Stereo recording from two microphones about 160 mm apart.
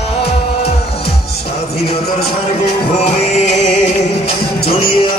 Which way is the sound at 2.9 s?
45° left (ahead or behind).